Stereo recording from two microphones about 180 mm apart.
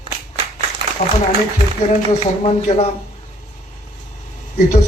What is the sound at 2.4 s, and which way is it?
Speech, 35° left (ahead or behind).